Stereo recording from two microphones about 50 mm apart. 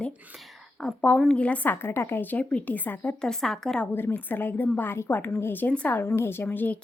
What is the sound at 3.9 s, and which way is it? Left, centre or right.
A woman's voice, left.